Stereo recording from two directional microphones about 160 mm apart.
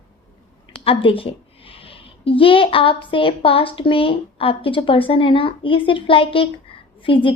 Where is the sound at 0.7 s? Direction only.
35° left (ahead or behind).